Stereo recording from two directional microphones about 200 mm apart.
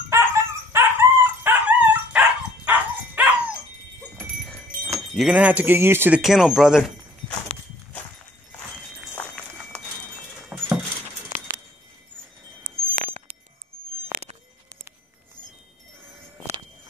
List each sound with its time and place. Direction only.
0.1 s dog: 10° right (ahead or behind)
5.1 s speech: 5° right (ahead or behind)
10.5 s a sound: 5° right (ahead or behind)
12.6 s wind chime: 45° right (ahead or behind)